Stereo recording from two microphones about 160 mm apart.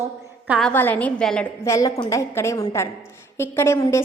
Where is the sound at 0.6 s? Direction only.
10° left (ahead or behind).